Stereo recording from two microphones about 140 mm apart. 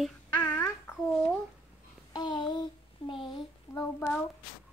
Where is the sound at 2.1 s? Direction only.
35° left (ahead or behind).